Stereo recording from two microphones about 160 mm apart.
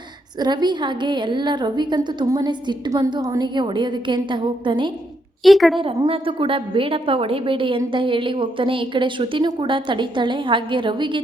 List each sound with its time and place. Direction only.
0.3 s a woman's voice: 25° right (ahead or behind)
5.4 s a woman's voice: centre (ahead or behind)
5.8 s a woman's voice: 35° right (ahead or behind)